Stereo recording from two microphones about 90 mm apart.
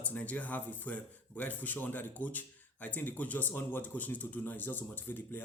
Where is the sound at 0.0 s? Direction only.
15° left (ahead or behind).